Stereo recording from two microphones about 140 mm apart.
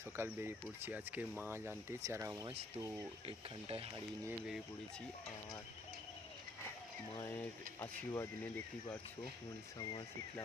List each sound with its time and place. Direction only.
0.2 s speech: 15° right (ahead or behind)
3.2 s speech: 45° right (ahead or behind)
7.2 s speech: 15° left (ahead or behind)